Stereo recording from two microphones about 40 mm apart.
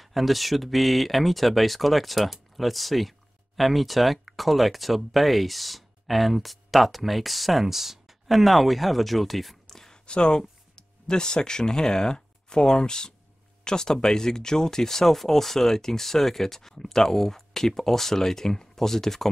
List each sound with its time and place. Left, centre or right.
0.0 s speech: centre
10.0 s speech: left